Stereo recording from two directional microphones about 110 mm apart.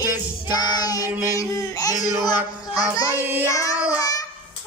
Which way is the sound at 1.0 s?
20° right (ahead or behind).